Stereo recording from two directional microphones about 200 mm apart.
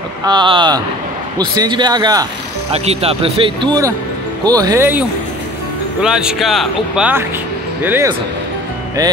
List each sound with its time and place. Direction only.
0.2 s speech: 20° right (ahead or behind)
2.7 s speech: 30° right (ahead or behind); by 5.0 s 10° right (ahead or behind)
6.0 s speech: 5° right (ahead or behind)